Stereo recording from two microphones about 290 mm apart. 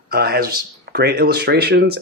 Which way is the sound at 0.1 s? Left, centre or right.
Right.